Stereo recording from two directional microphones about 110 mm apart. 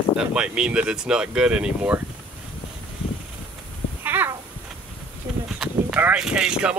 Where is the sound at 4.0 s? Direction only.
15° right (ahead or behind).